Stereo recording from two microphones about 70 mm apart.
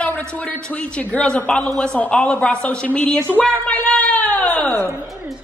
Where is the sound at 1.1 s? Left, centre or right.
Centre.